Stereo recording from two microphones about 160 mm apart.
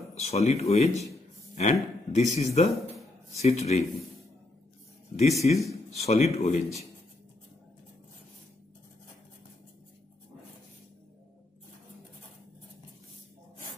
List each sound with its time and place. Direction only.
0.1 s speech: 40° left (ahead or behind)
5.4 s speech: 50° left (ahead or behind)